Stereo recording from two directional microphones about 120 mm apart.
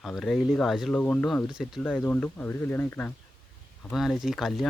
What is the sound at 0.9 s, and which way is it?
Speech, 10° left (ahead or behind).